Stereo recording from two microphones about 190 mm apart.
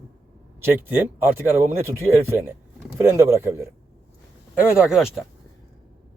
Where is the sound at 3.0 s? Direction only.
15° right (ahead or behind).